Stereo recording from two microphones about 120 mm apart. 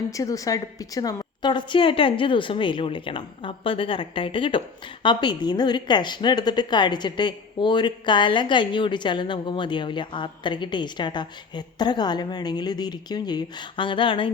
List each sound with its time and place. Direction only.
0.1 s a woman's voice: 30° left (ahead or behind); by 14.3 s 45° left (ahead or behind)